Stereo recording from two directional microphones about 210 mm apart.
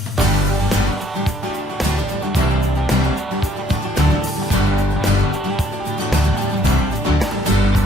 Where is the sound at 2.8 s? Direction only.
Centre (ahead or behind).